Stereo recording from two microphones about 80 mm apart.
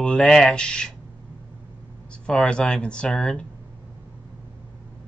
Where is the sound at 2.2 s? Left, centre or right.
Centre.